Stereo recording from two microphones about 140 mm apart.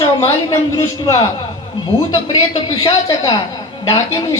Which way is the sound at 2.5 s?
40° left (ahead or behind).